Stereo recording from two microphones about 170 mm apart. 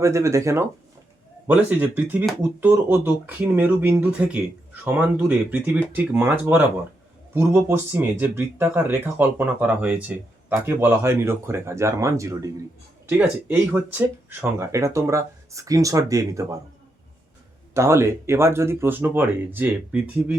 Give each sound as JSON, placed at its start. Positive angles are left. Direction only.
{"t": 0.0, "sound": "speech", "side_deg": -15}
{"t": 17.7, "sound": "speech", "side_deg": -15}